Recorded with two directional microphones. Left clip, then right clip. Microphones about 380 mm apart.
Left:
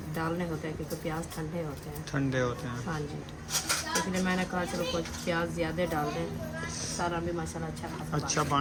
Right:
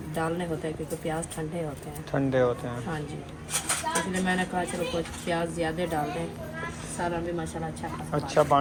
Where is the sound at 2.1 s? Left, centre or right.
Centre.